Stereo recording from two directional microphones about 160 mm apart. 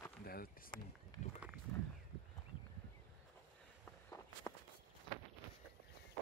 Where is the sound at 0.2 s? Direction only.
70° left (ahead or behind).